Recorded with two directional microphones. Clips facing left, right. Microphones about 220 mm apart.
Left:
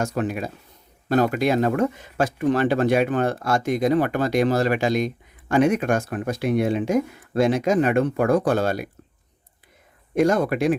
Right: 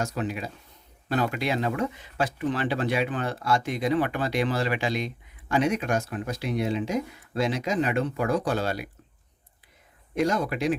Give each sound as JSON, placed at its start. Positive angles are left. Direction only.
{"t": 0.0, "sound": "speech", "side_deg": 50}
{"t": 10.2, "sound": "speech", "side_deg": 50}